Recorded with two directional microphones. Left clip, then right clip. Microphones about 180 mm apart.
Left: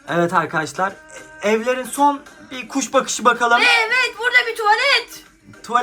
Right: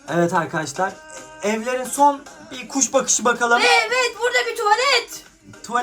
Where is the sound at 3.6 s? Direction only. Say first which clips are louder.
Left 1 dB; 45° right (ahead or behind).